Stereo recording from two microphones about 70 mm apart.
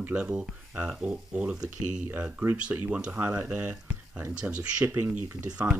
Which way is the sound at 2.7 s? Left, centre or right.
Centre.